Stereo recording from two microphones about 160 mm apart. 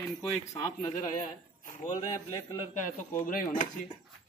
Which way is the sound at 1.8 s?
25° left (ahead or behind).